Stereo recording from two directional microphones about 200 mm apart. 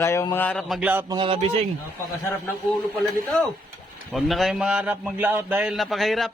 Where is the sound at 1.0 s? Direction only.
20° right (ahead or behind).